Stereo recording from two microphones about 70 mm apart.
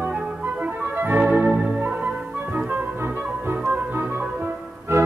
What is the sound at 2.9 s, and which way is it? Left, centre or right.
Music, right.